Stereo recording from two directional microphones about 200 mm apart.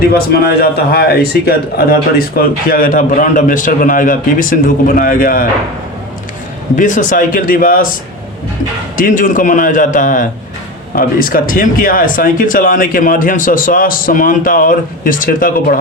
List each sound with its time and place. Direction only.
0.0 s a man's voice: 50° left (ahead or behind)
6.7 s a man's voice: 40° left (ahead or behind)
9.0 s a man's voice: 40° left (ahead or behind)